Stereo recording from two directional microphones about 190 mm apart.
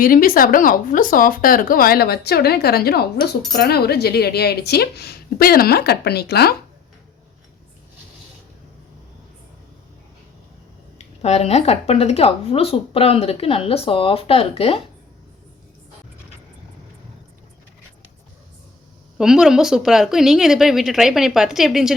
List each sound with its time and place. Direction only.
0.0 s a woman's voice: 50° left (ahead or behind)
10.9 s a woman's voice: 35° left (ahead or behind)
19.1 s a woman's voice: 5° right (ahead or behind)